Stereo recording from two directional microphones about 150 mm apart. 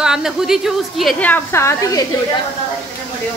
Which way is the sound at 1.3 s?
15° left (ahead or behind).